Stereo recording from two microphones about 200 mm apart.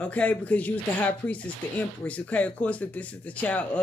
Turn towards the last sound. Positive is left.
turn(degrees=5)  # may be behind; listen again after turning